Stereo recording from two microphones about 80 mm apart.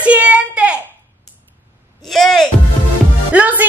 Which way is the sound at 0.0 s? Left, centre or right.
Centre.